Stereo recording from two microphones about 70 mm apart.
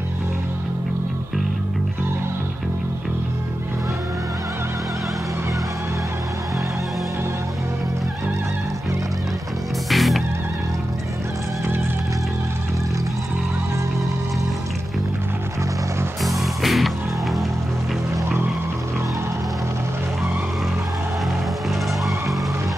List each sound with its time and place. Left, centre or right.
9.8 s music: centre
16.2 s music: centre